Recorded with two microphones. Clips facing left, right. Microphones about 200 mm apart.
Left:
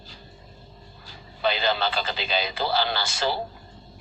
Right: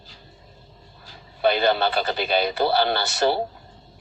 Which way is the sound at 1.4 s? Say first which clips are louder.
Right 5 dB; 60° right (ahead or behind).